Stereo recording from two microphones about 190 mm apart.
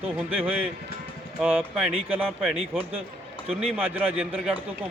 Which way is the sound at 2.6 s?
30° right (ahead or behind).